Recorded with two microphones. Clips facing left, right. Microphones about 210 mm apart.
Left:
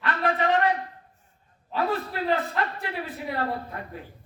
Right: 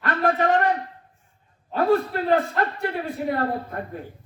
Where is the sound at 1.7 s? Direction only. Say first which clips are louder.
Right 7 dB; 45° right (ahead or behind).